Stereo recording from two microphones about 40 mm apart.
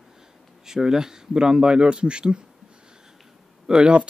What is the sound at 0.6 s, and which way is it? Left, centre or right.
Speech, centre.